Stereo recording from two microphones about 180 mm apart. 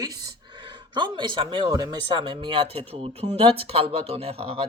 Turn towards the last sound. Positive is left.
turn(degrees=-30)  # may be behind; listen again after turning